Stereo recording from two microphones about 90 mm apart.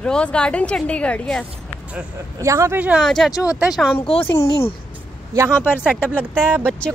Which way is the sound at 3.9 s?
90° left.